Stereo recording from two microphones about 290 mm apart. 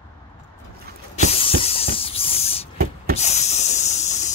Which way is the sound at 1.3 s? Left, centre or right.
Centre.